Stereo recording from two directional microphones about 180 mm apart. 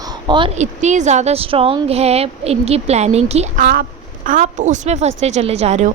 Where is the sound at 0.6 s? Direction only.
40° right (ahead or behind).